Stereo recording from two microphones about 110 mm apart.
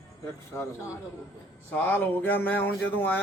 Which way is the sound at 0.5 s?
20° left (ahead or behind).